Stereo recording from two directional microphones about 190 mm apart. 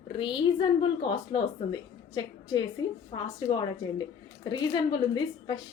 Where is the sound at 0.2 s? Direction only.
25° left (ahead or behind).